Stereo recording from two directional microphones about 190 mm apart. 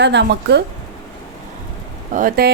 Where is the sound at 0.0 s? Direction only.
65° right (ahead or behind).